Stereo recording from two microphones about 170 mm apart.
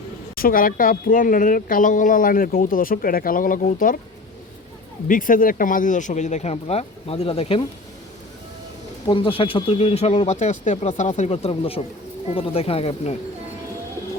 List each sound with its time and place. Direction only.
0.3 s speech: 55° left (ahead or behind)
5.0 s speech: 50° left (ahead or behind); by 7.6 s 35° left (ahead or behind)
9.0 s speech: 30° left (ahead or behind)